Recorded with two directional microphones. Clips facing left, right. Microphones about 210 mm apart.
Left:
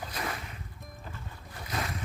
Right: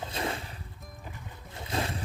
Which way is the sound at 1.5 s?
25° right (ahead or behind).